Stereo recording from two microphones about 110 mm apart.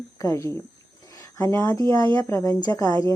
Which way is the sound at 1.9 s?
35° left (ahead or behind).